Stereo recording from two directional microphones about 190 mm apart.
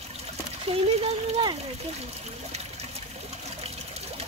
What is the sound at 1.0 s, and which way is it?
Speech, 30° right (ahead or behind).